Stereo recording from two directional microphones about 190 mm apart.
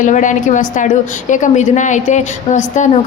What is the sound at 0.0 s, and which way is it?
A woman's voice, 40° left (ahead or behind).